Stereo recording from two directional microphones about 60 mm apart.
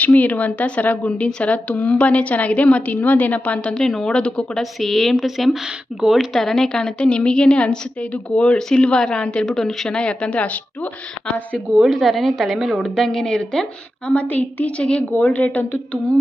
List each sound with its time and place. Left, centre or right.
0.0 s speech: left
3.8 s a woman's voice: centre
4.6 s a woman's voice: centre; by 10.6 s left
11.8 s a woman's voice: centre
14.1 s a woman's voice: left
15.1 s speech: left